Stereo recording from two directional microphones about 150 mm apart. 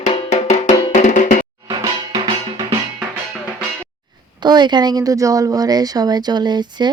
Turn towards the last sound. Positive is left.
turn(degrees=-30)  # may be behind; listen again after turning